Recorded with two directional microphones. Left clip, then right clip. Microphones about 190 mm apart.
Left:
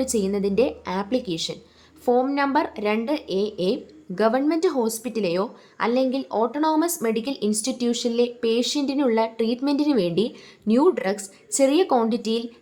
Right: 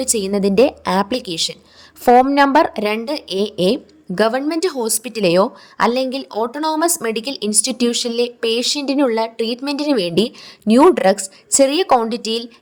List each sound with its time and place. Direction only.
0.0 s speech: 40° right (ahead or behind)